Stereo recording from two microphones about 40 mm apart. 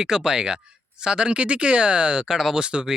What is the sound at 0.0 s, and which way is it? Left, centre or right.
Speech, centre.